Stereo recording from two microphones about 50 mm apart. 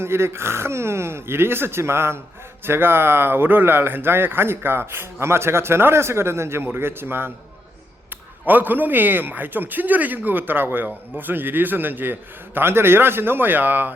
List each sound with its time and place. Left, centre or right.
0.0 s speech: right
8.4 s speech: right
12.5 s speech: right